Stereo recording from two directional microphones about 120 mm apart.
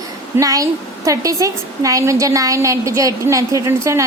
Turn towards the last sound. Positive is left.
turn(degrees=-25)  # may be behind; listen again after turning